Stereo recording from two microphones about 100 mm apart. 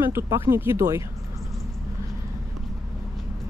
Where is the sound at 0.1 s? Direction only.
25° right (ahead or behind).